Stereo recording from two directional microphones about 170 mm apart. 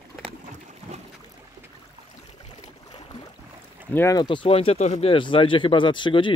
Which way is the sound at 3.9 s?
15° left (ahead or behind).